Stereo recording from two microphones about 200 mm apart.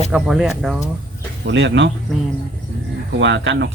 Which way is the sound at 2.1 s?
Centre (ahead or behind).